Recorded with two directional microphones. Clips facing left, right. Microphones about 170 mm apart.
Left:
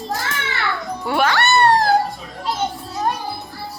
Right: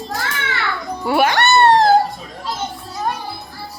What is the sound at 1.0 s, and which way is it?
Speech, 5° right (ahead or behind).